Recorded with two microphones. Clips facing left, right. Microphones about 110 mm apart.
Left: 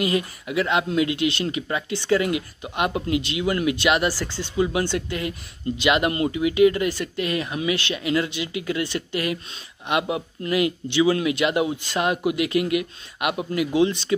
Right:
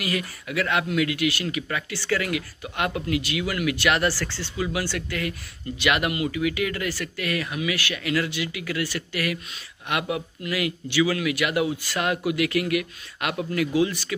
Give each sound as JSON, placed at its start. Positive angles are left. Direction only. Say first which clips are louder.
{"t": 0.0, "sound": "speech", "louder": "left 5 dB", "side_deg": 25}